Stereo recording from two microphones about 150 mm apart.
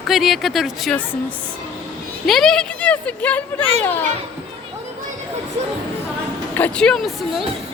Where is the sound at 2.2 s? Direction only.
Centre (ahead or behind).